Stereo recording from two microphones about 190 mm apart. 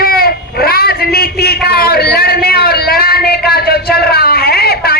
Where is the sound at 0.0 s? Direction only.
50° left (ahead or behind).